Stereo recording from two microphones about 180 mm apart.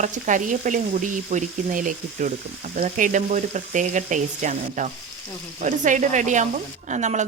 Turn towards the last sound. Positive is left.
turn(degrees=-40)  # may be behind; listen again after turning